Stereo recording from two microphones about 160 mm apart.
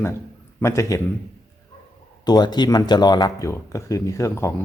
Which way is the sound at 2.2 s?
25° left (ahead or behind).